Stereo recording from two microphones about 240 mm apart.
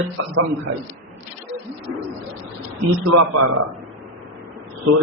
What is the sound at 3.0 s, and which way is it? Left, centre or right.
Speech, right.